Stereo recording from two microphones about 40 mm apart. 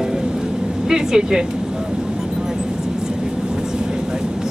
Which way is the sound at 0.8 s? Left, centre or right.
Centre.